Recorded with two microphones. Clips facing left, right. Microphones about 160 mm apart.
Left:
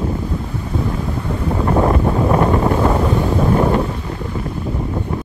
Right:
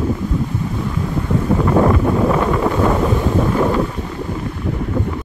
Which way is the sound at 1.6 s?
35° left (ahead or behind).